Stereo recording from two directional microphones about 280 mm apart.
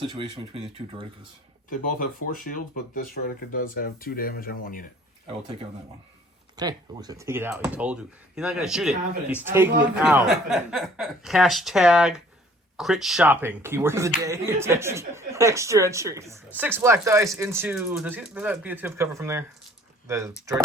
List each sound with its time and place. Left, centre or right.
0.0 s speech: centre
1.7 s speech: left
6.6 s speech: centre